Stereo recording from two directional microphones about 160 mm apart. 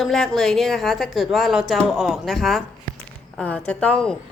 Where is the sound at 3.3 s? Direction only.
10° left (ahead or behind).